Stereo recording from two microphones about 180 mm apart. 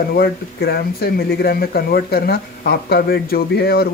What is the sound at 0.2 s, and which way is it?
Speech, 60° left (ahead or behind).